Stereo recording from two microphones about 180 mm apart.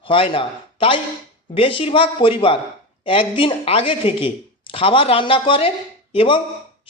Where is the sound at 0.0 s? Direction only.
30° left (ahead or behind).